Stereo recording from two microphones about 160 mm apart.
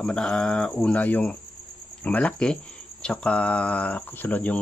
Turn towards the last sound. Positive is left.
turn(degrees=10)  # may be behind; listen again after turning